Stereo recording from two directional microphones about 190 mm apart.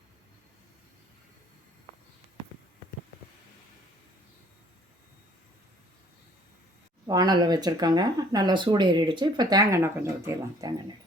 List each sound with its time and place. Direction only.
7.1 s speech: 20° right (ahead or behind)